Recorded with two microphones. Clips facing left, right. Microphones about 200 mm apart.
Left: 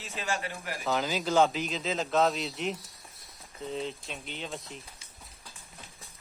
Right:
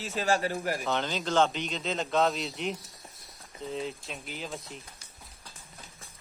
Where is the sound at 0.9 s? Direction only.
5° left (ahead or behind).